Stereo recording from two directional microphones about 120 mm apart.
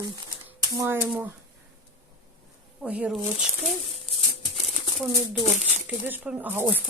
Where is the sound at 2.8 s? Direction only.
10° right (ahead or behind).